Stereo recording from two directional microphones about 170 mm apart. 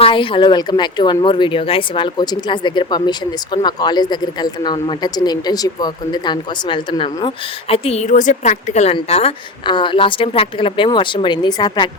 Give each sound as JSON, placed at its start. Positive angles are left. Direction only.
{"t": 0.0, "sound": "speech", "side_deg": 30}